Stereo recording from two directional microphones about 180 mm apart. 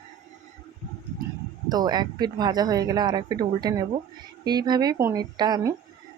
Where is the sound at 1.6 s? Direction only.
20° right (ahead or behind).